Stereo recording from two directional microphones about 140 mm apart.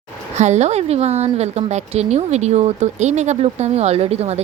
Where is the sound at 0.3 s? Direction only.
55° right (ahead or behind).